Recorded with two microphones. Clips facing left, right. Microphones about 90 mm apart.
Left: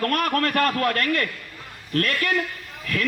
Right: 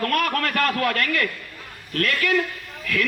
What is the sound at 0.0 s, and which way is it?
A man's voice, 30° left (ahead or behind).